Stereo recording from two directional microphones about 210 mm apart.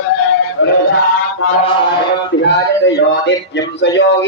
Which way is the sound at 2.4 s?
55° left (ahead or behind).